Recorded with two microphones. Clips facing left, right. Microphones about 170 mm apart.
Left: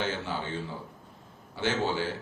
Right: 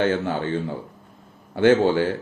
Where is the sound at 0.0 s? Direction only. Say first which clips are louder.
Right 10 dB; 55° right (ahead or behind).